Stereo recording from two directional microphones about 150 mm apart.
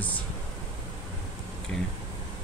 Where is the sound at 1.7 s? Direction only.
5° left (ahead or behind).